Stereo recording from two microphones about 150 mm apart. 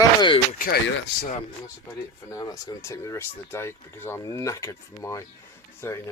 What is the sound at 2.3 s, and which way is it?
Speech, 25° left (ahead or behind).